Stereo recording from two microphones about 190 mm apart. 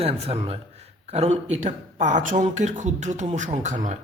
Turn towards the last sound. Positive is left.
turn(degrees=-40)  # may be behind; listen again after turning